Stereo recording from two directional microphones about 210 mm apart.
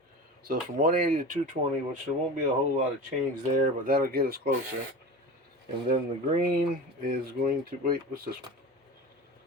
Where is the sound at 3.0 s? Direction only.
40° right (ahead or behind).